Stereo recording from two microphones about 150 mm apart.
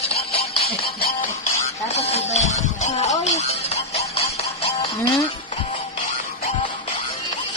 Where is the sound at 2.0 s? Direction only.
45° left (ahead or behind).